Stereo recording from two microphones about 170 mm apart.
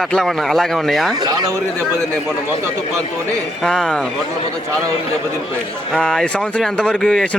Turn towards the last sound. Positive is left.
turn(degrees=5)  # may be behind; listen again after turning